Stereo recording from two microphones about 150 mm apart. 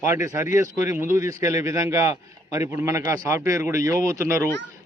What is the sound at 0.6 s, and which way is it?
A man's voice, 20° right (ahead or behind).